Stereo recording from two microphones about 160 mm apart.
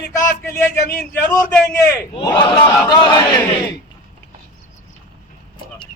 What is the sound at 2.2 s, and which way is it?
Speech, 25° left (ahead or behind).